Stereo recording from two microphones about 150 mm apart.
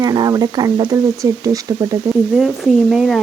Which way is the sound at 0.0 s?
25° right (ahead or behind).